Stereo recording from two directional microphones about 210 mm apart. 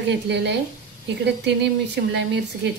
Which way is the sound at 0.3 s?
55° right (ahead or behind).